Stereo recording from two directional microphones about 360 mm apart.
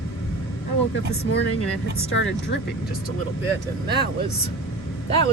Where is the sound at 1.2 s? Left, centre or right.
Left.